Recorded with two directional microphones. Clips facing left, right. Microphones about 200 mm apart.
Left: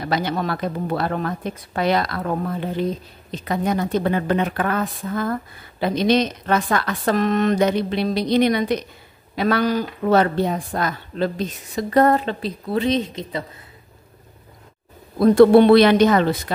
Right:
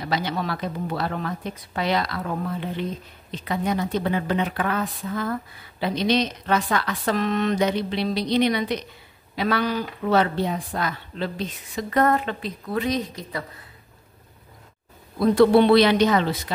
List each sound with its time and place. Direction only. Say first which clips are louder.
0.0 s speech: left 3 dB; 50° left (ahead or behind); by 13.5 s 25° left (ahead or behind)
15.1 s speech: left 5 dB; 50° left (ahead or behind)